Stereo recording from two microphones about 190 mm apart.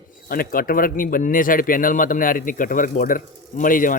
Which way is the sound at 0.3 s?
50° left (ahead or behind).